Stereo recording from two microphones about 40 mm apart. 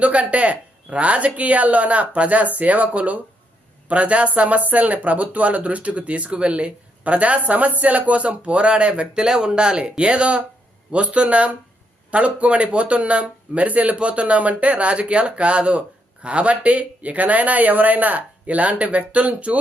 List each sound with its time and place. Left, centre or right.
0.0 s speech: right